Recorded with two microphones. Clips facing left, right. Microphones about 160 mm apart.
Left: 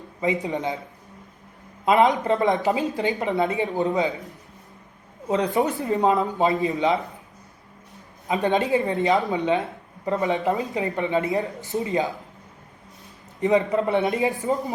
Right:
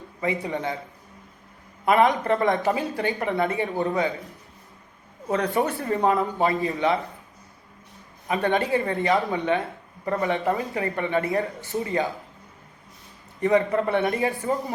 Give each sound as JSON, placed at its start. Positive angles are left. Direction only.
{"t": 0.2, "sound": "speech", "side_deg": 20}
{"t": 1.8, "sound": "speech", "side_deg": 20}
{"t": 5.3, "sound": "speech", "side_deg": 20}
{"t": 8.3, "sound": "speech", "side_deg": 20}
{"t": 13.4, "sound": "speech", "side_deg": 20}